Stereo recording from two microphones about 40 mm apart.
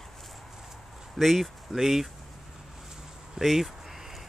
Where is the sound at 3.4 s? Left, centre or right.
Centre.